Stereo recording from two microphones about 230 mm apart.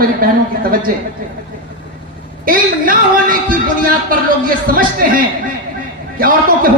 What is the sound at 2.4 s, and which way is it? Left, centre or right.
Speech, right.